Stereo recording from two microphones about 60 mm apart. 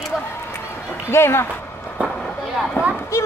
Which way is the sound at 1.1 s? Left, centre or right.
Left.